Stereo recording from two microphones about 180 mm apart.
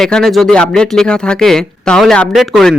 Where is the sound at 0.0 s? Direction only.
Centre (ahead or behind).